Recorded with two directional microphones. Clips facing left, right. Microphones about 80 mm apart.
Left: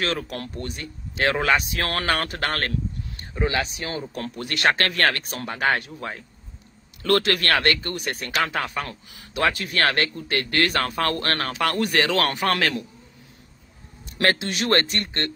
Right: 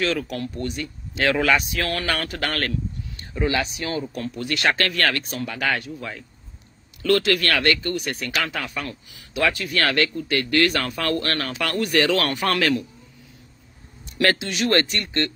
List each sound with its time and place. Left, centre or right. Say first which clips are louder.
0.0 s speech: right 3 dB; left
12.4 s a man's voice: right 1 dB; centre
14.1 s speech: right 1 dB; left